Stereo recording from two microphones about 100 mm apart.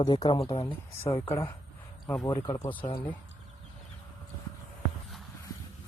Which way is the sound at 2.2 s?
45° left (ahead or behind).